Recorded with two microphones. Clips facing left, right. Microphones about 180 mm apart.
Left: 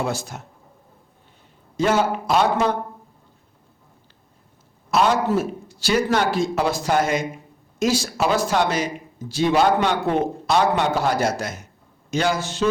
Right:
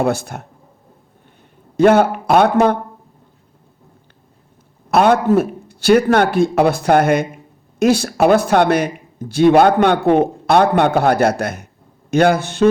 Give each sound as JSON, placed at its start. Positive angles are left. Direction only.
{"t": 0.0, "sound": "speech", "side_deg": -60}
{"t": 1.7, "sound": "speech", "side_deg": -60}
{"t": 4.9, "sound": "speech", "side_deg": -55}